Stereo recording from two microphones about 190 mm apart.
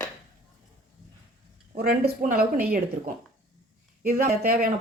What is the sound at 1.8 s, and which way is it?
Speech, 55° right (ahead or behind).